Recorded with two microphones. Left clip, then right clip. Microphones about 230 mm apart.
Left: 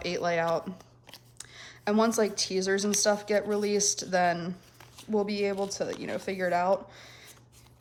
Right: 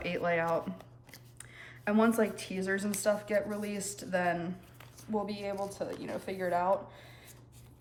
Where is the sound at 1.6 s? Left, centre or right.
Centre.